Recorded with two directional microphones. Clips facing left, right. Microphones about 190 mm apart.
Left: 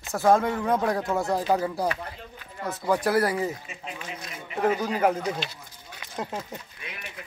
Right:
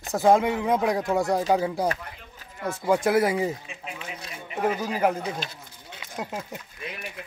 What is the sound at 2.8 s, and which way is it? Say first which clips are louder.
Speech: right 2 dB; 20° right (ahead or behind).